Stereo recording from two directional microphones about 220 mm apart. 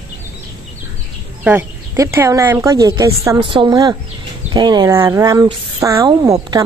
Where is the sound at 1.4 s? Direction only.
10° right (ahead or behind).